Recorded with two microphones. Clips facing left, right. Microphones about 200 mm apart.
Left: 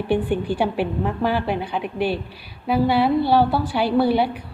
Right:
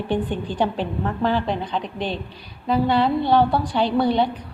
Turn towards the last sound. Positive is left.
turn(degrees=5)  # may be behind; listen again after turning